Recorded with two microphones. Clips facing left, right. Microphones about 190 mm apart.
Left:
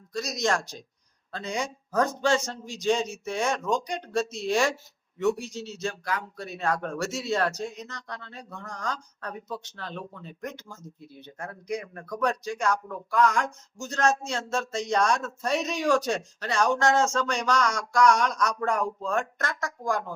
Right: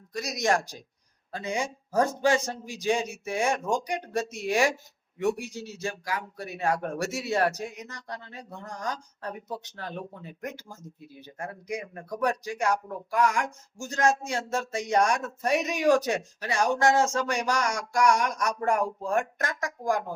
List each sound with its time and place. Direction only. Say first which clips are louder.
0.1 s speech: right 1 dB; 15° right (ahead or behind)